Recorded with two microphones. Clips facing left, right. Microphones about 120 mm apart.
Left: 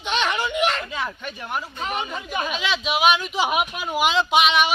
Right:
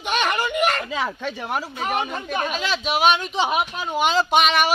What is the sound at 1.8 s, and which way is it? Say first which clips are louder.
Speech: right 4 dB; 50° right (ahead or behind).